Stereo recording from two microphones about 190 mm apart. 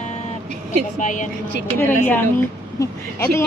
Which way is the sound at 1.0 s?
40° left (ahead or behind).